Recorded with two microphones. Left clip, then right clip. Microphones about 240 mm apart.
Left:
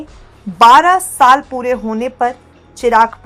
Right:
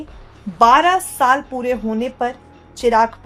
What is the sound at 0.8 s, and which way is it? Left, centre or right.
Speech, centre.